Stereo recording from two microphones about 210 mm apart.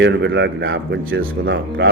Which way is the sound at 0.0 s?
60° right (ahead or behind).